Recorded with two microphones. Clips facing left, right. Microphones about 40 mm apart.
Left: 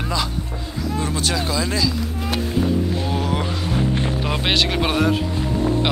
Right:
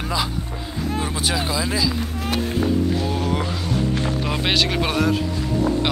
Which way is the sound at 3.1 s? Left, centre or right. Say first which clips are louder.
Even; centre.